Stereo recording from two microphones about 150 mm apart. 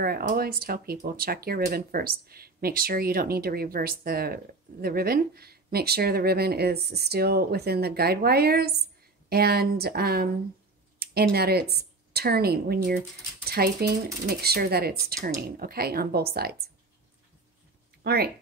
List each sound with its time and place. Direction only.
0.0 s speech: 90° right
11.3 s speech: 90° right
18.0 s speech: 90° right